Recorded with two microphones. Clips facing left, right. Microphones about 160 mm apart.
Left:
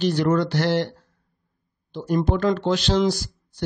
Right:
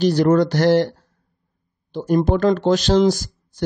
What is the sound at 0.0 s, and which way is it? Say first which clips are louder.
Speech: right 5 dB; 40° right (ahead or behind).